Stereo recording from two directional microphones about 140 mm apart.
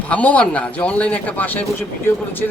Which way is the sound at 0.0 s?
10° left (ahead or behind).